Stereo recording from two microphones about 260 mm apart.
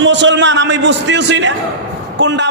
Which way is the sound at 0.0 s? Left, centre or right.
Right.